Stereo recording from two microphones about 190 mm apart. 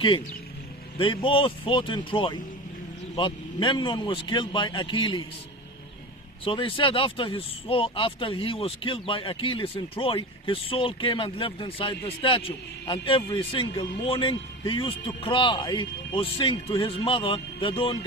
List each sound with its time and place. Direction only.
0.9 s speech: 25° left (ahead or behind)
6.4 s speech: 25° left (ahead or behind)